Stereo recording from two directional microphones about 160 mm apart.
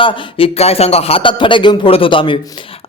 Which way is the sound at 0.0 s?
35° left (ahead or behind).